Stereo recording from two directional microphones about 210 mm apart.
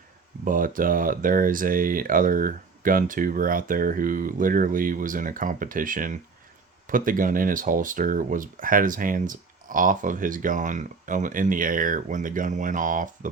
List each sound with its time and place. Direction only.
0.4 s speech: 40° right (ahead or behind)